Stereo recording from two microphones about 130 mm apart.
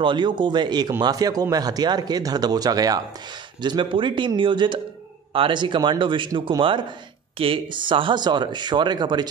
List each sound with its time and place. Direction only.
0.0 s speech: 35° right (ahead or behind)